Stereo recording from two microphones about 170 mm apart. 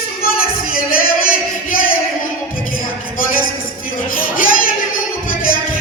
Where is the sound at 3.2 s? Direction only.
55° left (ahead or behind).